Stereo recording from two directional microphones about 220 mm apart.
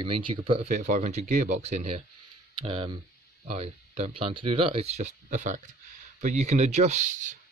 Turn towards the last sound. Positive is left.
turn(degrees=-35)  # may be behind; listen again after turning